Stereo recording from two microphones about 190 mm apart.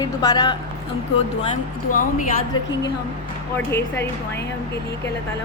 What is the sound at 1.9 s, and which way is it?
Speech, 45° left (ahead or behind).